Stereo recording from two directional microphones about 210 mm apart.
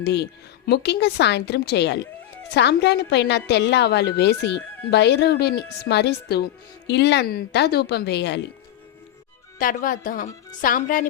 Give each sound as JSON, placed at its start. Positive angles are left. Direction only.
{"t": 0.0, "sound": "a woman's voice", "side_deg": 55}
{"t": 9.6, "sound": "speech", "side_deg": 40}